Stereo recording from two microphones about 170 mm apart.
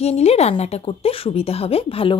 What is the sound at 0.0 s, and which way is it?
A woman's voice, 40° left (ahead or behind).